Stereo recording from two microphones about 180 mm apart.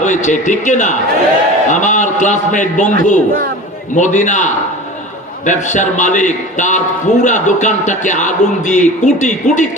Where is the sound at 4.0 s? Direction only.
45° left (ahead or behind).